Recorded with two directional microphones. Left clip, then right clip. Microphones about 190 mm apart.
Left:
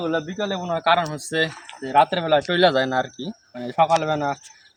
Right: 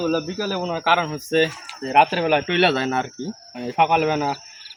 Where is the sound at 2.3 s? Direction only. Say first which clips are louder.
Left 1 dB; 20° left (ahead or behind).